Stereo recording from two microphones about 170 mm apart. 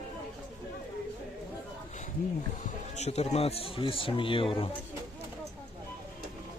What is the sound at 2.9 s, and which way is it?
Speech, 40° left (ahead or behind).